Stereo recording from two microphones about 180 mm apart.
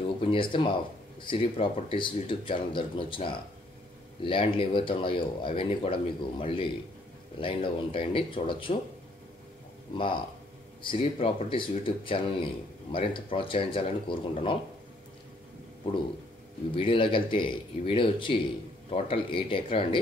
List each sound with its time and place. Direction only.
0.2 s speech: 30° left (ahead or behind)
9.9 s speech: 25° left (ahead or behind)
16.7 s speech: 30° left (ahead or behind)